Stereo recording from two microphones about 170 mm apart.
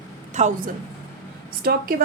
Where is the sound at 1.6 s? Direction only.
60° right (ahead or behind).